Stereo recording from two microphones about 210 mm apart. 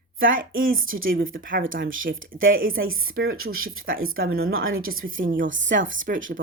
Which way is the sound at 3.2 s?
80° right.